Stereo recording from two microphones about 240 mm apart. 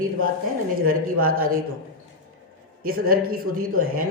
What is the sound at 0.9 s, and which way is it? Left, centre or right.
Speech, right.